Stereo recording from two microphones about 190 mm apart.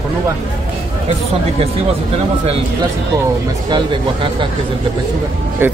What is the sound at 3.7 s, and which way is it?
Speech, 25° right (ahead or behind).